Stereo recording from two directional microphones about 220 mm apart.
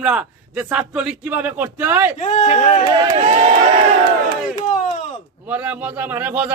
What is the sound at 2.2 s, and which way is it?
Speech, 30° left (ahead or behind).